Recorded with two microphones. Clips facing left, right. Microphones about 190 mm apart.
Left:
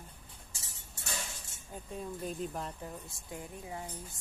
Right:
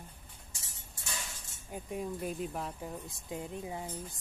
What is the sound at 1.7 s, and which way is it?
Speech, 15° right (ahead or behind).